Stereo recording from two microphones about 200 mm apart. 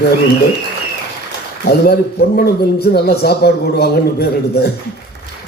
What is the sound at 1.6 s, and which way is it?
A man's voice, 50° left (ahead or behind).